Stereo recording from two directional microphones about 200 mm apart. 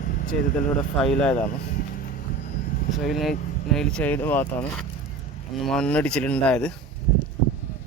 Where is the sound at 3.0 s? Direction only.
Centre (ahead or behind).